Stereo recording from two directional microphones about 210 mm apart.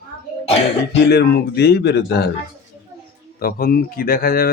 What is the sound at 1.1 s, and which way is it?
Speech, 50° left (ahead or behind).